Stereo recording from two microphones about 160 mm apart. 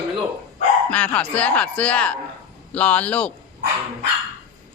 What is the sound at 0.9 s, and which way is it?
Speech, 10° left (ahead or behind).